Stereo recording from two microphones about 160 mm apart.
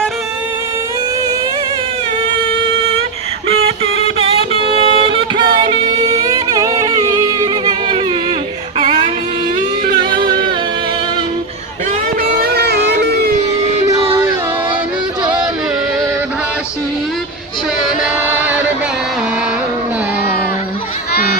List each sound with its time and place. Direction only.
4.8 s music: 35° right (ahead or behind)
8.8 s a sound: 35° right (ahead or behind)
12.4 s music: 80° right
15.2 s music: 25° right (ahead or behind)
18.0 s music: 10° right (ahead or behind)